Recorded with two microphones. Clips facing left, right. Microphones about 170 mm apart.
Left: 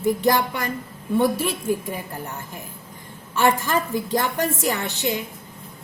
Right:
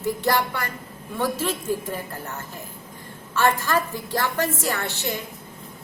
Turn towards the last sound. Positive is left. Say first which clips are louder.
# left 3 dB
turn(degrees=15)  # may be behind; listen again after turning